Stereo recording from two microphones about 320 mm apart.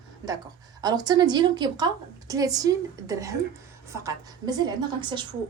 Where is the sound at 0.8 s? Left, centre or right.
Centre.